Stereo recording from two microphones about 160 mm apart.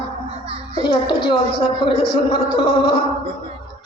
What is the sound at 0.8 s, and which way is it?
Speech, 30° left (ahead or behind).